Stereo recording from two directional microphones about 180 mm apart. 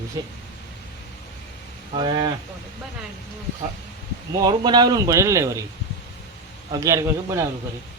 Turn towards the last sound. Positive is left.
turn(degrees=-20)  # may be behind; listen again after turning